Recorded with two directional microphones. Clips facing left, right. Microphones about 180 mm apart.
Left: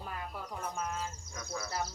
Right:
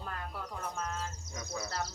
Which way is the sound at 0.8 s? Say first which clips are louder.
Left 1 dB; 10° left (ahead or behind).